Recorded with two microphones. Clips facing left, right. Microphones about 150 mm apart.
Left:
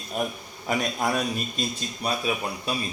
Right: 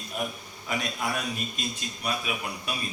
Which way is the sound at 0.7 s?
40° left (ahead or behind).